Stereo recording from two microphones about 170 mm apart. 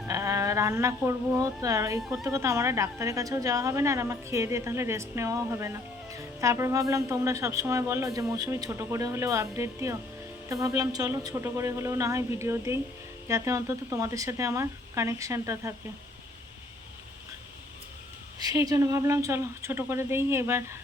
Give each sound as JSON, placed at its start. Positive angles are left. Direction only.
{"t": 0.1, "sound": "a woman's voice", "side_deg": -15}
{"t": 2.0, "sound": "a woman's voice", "side_deg": 0}
{"t": 2.2, "sound": "a woman's voice", "side_deg": -15}
{"t": 18.3, "sound": "a woman's voice", "side_deg": -20}